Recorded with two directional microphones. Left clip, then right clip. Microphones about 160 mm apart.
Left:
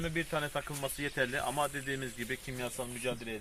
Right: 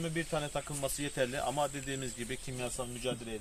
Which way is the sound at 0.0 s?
20° right (ahead or behind).